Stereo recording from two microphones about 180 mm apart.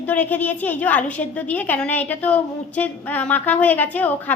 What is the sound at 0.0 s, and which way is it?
A woman's voice, 10° left (ahead or behind).